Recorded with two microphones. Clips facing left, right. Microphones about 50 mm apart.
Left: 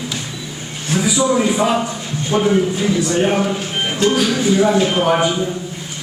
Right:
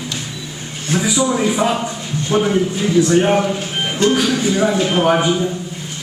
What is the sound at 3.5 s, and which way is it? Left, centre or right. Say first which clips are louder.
A man's voice: even; centre.